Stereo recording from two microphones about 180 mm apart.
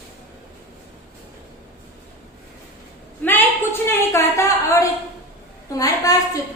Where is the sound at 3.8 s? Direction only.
15° left (ahead or behind).